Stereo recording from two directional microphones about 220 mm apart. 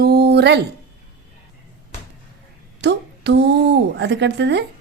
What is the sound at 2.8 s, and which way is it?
A woman's voice, 50° right (ahead or behind).